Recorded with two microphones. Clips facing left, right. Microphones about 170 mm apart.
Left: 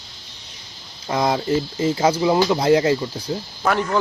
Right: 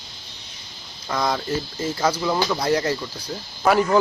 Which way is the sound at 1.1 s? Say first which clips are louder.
Left 4 dB; 25° left (ahead or behind).